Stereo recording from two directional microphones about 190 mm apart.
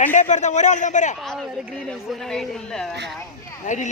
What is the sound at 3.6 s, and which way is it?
Speech, 40° left (ahead or behind).